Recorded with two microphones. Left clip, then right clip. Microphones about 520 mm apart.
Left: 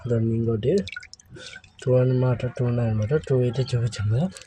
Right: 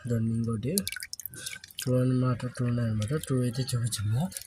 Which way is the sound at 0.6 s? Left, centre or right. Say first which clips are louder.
Left 10 dB; right.